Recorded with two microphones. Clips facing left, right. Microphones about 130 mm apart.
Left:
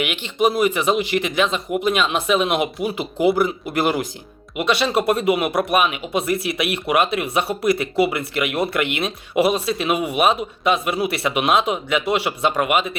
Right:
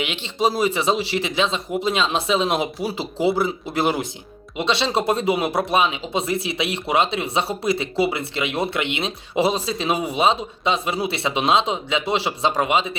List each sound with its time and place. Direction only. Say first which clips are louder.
0.0 s speech: left 2 dB; 30° right (ahead or behind)